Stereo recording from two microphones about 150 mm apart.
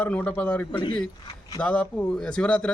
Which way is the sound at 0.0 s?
10° left (ahead or behind).